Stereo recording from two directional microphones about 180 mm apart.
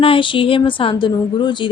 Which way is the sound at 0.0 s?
30° left (ahead or behind).